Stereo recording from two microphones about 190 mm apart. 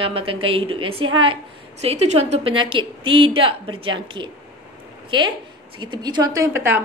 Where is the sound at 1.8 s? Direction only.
35° right (ahead or behind).